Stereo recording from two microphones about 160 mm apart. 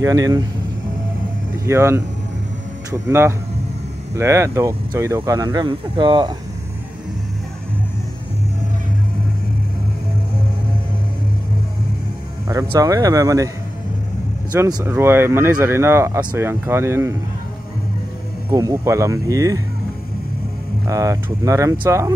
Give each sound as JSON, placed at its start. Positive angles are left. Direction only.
{"t": 0.0, "sound": "speech", "side_deg": -25}
{"t": 1.7, "sound": "speech", "side_deg": -15}
{"t": 12.4, "sound": "speech", "side_deg": -20}
{"t": 14.7, "sound": "speech", "side_deg": -20}
{"t": 18.5, "sound": "speech", "side_deg": -20}
{"t": 20.8, "sound": "speech", "side_deg": -20}